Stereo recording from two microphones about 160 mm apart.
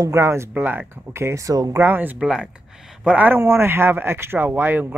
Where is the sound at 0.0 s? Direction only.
20° right (ahead or behind).